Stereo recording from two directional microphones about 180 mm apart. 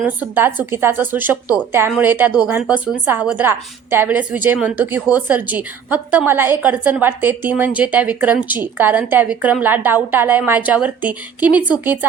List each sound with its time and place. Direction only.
0.0 s a woman's voice: 10° right (ahead or behind)